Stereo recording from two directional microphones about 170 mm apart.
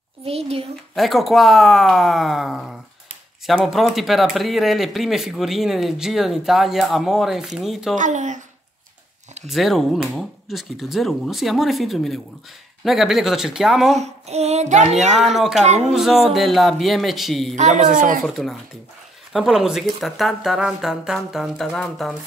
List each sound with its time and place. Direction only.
0.2 s a child's voice: 35° right (ahead or behind)
0.9 s speech: centre (ahead or behind)
7.9 s speech: 45° right (ahead or behind)
9.5 s speech: centre (ahead or behind)
14.0 s female singing: 40° right (ahead or behind)
15.1 s speech: centre (ahead or behind)
17.6 s speech: 45° right (ahead or behind)
18.2 s speech: centre (ahead or behind)